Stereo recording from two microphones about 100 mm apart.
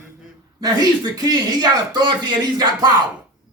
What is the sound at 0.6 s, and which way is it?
Speech, 40° right (ahead or behind).